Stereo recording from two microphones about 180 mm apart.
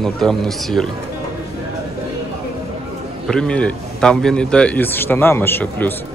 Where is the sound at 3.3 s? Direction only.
5° left (ahead or behind).